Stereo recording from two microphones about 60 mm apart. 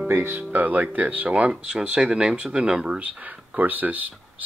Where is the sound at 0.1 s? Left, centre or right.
Right.